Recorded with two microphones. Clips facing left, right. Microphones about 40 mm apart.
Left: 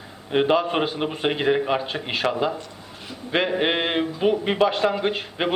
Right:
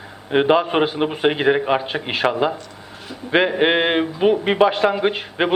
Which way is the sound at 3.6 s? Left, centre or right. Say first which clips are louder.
Right 5 dB; right.